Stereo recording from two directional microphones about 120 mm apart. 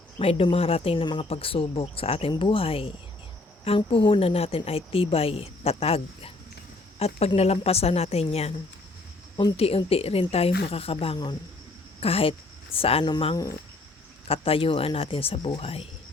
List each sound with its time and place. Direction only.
0.2 s a woman's voice: 55° left (ahead or behind)
9.6 s a woman's voice: 55° left (ahead or behind)
13.1 s speech: 40° left (ahead or behind)
14.3 s a woman's voice: 50° left (ahead or behind)